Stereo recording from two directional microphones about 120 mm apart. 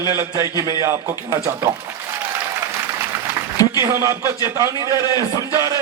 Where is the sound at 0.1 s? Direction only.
25° right (ahead or behind).